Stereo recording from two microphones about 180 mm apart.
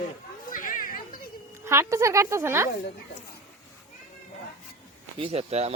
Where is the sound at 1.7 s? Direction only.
15° right (ahead or behind).